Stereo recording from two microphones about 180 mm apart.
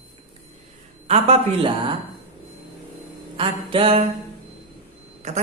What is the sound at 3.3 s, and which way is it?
Speech, 30° right (ahead or behind).